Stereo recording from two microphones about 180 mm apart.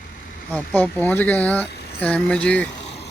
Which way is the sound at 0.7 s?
10° left (ahead or behind).